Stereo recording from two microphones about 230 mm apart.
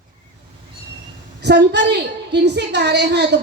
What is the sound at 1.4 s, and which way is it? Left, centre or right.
A woman's voice, right.